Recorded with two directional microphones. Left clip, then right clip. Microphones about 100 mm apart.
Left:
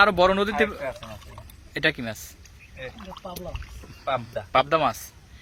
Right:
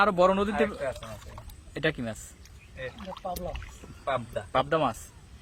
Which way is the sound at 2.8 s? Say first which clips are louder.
Even; 35° right (ahead or behind).